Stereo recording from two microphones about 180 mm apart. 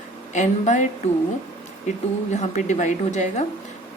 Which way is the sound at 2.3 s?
40° left (ahead or behind).